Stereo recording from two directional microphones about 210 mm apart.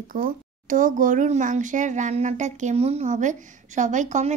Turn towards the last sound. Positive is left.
turn(degrees=-35)  # may be behind; listen again after turning